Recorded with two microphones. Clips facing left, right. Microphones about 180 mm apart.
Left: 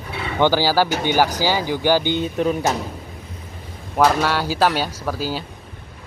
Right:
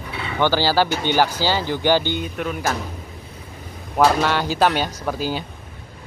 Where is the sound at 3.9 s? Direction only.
Centre (ahead or behind).